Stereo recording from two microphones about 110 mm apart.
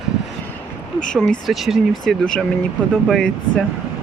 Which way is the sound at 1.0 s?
5° left (ahead or behind).